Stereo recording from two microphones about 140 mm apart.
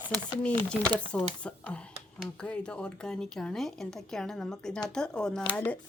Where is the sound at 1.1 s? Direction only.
10° left (ahead or behind).